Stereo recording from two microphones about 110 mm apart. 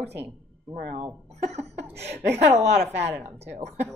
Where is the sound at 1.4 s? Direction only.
80° right.